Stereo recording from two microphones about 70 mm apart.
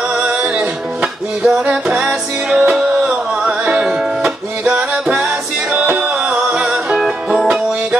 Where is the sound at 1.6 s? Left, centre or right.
Centre.